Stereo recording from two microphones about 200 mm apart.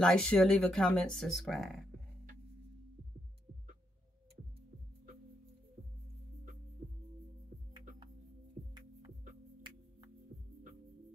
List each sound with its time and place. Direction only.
0.0 s speech: 5° left (ahead or behind)
8.6 s music: 45° right (ahead or behind)